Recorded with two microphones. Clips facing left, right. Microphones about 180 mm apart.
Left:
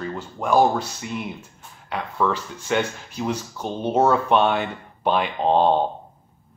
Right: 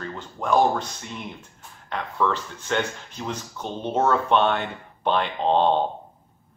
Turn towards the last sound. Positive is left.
turn(degrees=10)  # may be behind; listen again after turning